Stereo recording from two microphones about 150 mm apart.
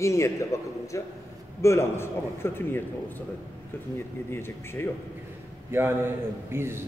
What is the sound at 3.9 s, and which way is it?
Speech, 15° left (ahead or behind).